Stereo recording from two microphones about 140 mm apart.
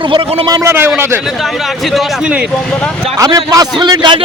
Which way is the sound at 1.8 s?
Centre (ahead or behind).